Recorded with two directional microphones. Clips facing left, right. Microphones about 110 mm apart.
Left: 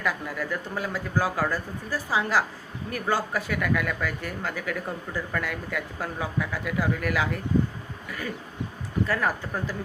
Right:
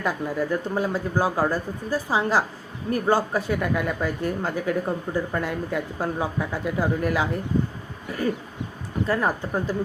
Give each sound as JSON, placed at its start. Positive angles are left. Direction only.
{"t": 0.0, "sound": "speech", "side_deg": -30}
{"t": 9.0, "sound": "speech", "side_deg": -25}